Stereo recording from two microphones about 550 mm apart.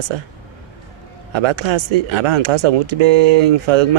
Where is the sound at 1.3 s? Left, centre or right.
Right.